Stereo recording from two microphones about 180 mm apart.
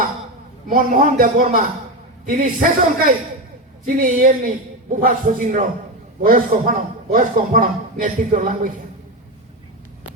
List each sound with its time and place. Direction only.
0.7 s a man's voice: 45° right (ahead or behind)